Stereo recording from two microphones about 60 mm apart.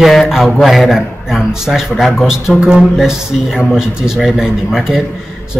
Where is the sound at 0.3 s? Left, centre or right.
Centre.